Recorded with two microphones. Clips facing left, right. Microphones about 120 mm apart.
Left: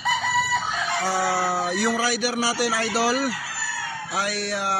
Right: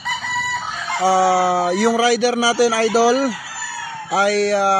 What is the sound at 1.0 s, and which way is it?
Speech, 90° right.